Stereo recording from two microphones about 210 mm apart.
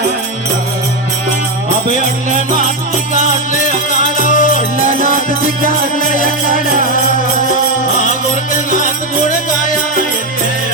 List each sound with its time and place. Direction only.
4.3 s music: 40° left (ahead or behind)
4.8 s music: 40° right (ahead or behind)
6.2 s music: 40° right (ahead or behind)
9.2 s music: 40° left (ahead or behind)